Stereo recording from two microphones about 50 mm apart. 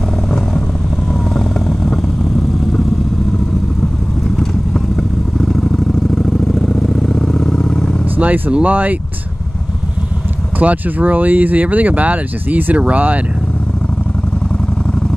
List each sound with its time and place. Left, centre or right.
1.3 s vehicle: centre
5.4 s vehicle: centre
8.2 s speech: right
10.6 s speech: right